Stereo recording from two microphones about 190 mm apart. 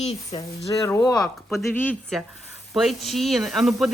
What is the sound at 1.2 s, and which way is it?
Speech, centre (ahead or behind).